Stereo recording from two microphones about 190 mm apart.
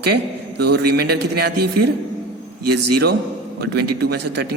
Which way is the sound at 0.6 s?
60° right (ahead or behind).